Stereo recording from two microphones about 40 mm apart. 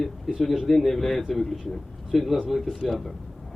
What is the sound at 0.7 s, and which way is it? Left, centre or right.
Speech, centre.